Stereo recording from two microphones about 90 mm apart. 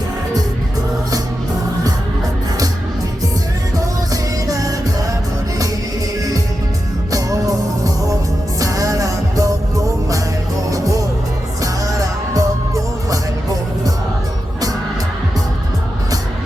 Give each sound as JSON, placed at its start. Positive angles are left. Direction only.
{"t": 4.1, "sound": "music", "side_deg": -40}
{"t": 7.1, "sound": "music", "side_deg": -40}